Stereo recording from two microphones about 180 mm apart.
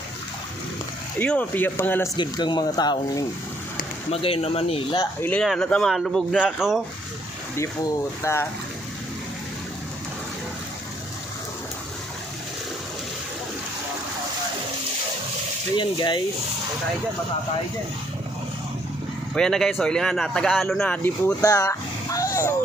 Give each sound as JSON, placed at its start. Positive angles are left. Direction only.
{"t": 1.2, "sound": "speech", "side_deg": 10}
{"t": 2.1, "sound": "speech", "side_deg": 25}
{"t": 4.1, "sound": "speech", "side_deg": 35}
{"t": 5.2, "sound": "speech", "side_deg": 5}
{"t": 7.5, "sound": "speech", "side_deg": 15}
{"t": 15.7, "sound": "speech", "side_deg": 25}
{"t": 19.3, "sound": "speech", "side_deg": 5}
{"t": 21.4, "sound": "a sound", "side_deg": 20}